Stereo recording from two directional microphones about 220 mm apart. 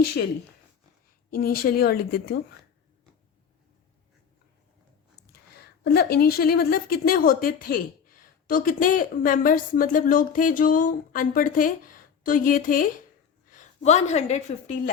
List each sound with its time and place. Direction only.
0.0 s speech: 45° left (ahead or behind)
1.3 s speech: 45° left (ahead or behind)
5.8 s a woman's voice: 45° left (ahead or behind); by 14.8 s 30° left (ahead or behind)